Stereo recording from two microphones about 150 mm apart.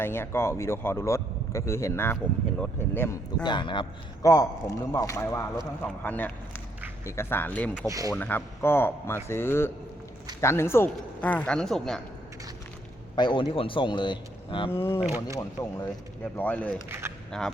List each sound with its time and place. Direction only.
0.0 s speech: 15° left (ahead or behind)
3.4 s a man's voice: 30° left (ahead or behind); by 7.9 s 10° left (ahead or behind)
7.9 s speech: 20° right (ahead or behind)
8.1 s speech: 10° left (ahead or behind)
13.1 s speech: 30° left (ahead or behind)
14.7 s speech: 15° left (ahead or behind)
15.0 s speech: 15° right (ahead or behind)
15.4 s a man's voice: 25° left (ahead or behind)
16.2 s speech: 10° left (ahead or behind)
17.0 s a sound: 15° right (ahead or behind)